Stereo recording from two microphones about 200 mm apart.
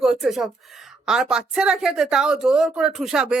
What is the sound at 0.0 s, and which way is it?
A woman's voice, centre (ahead or behind).